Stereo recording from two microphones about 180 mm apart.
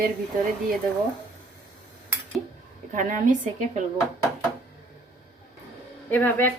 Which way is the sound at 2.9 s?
45° right (ahead or behind).